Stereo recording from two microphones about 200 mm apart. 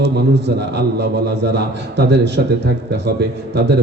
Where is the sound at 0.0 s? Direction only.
60° right (ahead or behind).